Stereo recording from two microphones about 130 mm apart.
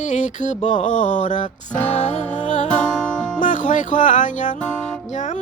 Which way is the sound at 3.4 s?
75° left (ahead or behind).